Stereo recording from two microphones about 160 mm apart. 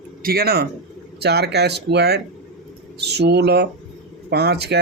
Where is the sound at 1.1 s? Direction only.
90° right.